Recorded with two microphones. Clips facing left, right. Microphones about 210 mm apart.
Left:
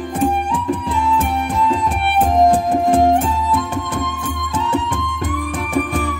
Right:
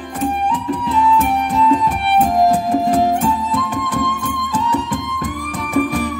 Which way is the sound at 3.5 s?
25° left (ahead or behind).